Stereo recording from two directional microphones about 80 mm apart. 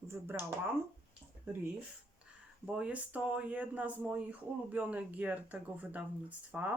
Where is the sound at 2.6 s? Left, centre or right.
Centre.